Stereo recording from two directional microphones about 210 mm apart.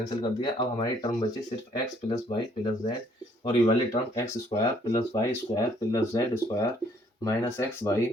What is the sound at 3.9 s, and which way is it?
Speech, 15° left (ahead or behind).